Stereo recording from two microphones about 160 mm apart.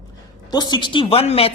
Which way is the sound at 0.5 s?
25° left (ahead or behind).